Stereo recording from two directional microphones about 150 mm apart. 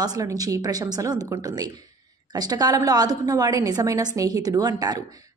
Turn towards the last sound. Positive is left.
turn(degrees=-25)  # may be behind; listen again after turning